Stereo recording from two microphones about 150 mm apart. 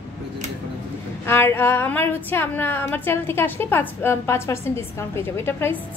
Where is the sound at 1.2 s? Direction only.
15° left (ahead or behind).